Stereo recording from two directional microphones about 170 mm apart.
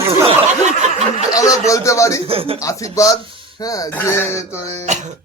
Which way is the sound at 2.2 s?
35° right (ahead or behind).